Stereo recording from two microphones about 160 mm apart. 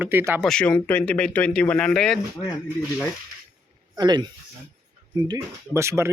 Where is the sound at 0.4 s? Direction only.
5° left (ahead or behind).